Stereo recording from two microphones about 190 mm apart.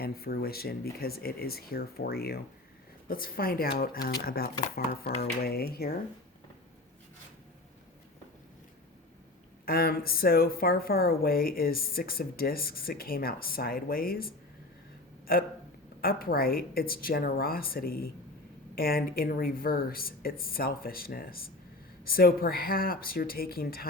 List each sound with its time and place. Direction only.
0.0 s speech: 55° left (ahead or behind)
9.6 s speech: 50° left (ahead or behind)